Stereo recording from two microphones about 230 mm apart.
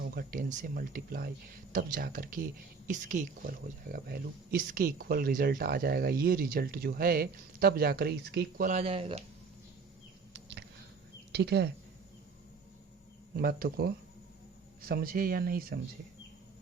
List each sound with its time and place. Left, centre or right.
0.0 s speech: right
11.3 s a woman's voice: right
13.3 s speech: right